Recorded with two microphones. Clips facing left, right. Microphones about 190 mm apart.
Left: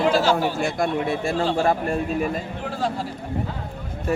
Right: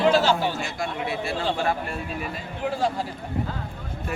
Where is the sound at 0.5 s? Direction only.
50° left (ahead or behind).